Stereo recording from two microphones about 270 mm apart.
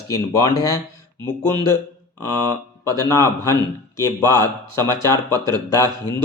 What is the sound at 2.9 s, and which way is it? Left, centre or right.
Speech, centre.